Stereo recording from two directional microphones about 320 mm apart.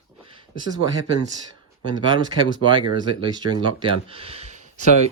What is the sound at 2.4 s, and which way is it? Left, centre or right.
Speech, centre.